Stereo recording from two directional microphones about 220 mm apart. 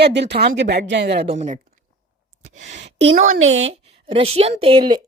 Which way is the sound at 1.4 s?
30° right (ahead or behind).